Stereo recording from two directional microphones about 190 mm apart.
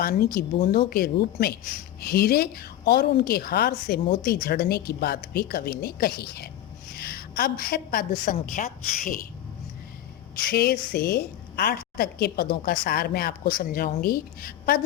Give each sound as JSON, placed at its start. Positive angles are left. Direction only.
{"t": 0.0, "sound": "a woman's voice", "side_deg": 50}
{"t": 10.4, "sound": "a woman's voice", "side_deg": 55}